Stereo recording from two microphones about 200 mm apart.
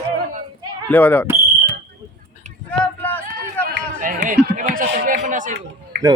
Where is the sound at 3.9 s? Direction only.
40° right (ahead or behind).